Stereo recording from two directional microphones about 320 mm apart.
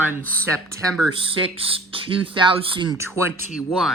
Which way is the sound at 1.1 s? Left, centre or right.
Centre.